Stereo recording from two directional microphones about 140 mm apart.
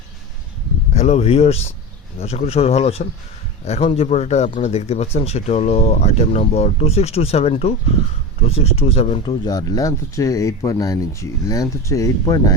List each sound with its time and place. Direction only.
0.9 s speech: 50° left (ahead or behind)
9.2 s speech: 30° left (ahead or behind)